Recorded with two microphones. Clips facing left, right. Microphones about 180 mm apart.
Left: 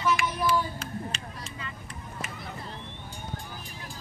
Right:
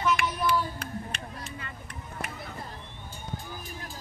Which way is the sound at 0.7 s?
60° right (ahead or behind).